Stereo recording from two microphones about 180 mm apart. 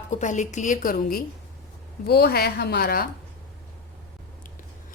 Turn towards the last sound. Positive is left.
turn(degrees=60)  # may be behind; listen again after turning